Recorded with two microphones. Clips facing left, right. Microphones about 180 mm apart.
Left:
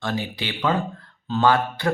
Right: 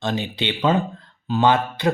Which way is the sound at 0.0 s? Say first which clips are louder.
Right 3 dB; 20° right (ahead or behind).